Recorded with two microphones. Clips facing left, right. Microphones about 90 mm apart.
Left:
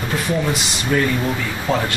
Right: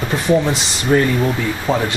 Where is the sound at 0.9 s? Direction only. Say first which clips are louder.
Right 4 dB; 30° right (ahead or behind).